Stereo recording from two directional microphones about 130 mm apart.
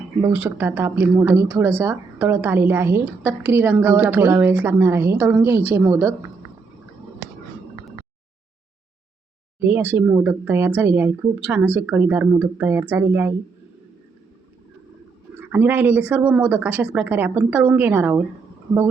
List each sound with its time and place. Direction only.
0.3 s a woman's voice: 15° right (ahead or behind)
9.6 s speech: 15° right (ahead or behind)
15.4 s speech: 15° right (ahead or behind)